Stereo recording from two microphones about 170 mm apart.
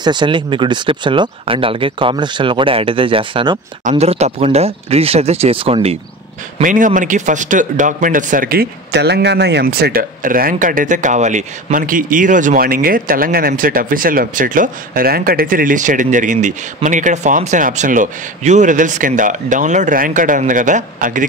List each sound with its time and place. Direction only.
0.0 s speech: 25° right (ahead or behind)
6.6 s a man's voice: 50° right (ahead or behind)